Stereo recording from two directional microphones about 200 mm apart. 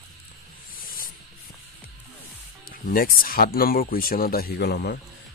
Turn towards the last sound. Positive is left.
turn(degrees=55)  # may be behind; listen again after turning